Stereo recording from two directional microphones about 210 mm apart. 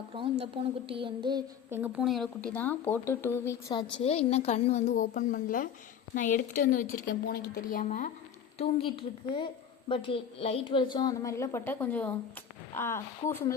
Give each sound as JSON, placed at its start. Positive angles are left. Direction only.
{"t": 0.1, "sound": "speech", "side_deg": -25}
{"t": 1.8, "sound": "a woman's voice", "side_deg": -5}
{"t": 3.7, "sound": "a woman's voice", "side_deg": 25}
{"t": 7.7, "sound": "a woman's voice", "side_deg": 35}